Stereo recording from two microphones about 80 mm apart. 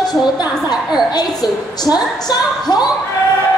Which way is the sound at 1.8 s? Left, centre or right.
Left.